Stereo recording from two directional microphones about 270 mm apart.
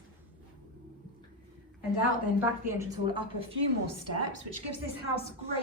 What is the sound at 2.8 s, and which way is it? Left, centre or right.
Speech, centre.